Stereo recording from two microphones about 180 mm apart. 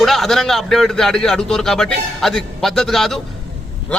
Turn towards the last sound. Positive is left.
turn(degrees=0)  # may be behind; listen again after turning